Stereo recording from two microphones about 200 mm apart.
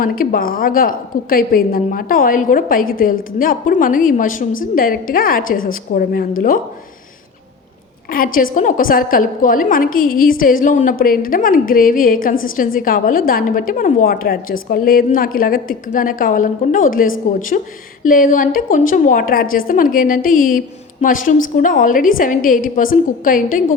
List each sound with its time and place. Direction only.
0.0 s a woman's voice: 45° left (ahead or behind)
8.1 s a woman's voice: 45° left (ahead or behind)